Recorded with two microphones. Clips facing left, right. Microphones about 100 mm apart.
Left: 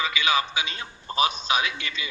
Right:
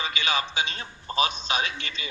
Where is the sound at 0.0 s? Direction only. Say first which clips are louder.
Left 3 dB; 35° right (ahead or behind).